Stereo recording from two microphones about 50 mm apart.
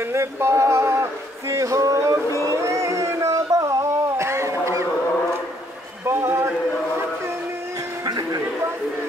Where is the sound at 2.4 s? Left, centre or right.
Right.